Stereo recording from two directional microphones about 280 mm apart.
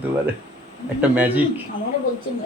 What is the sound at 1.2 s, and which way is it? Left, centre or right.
Speech, centre.